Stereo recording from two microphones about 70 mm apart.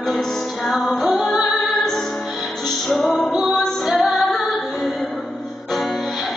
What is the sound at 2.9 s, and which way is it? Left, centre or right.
Music, left.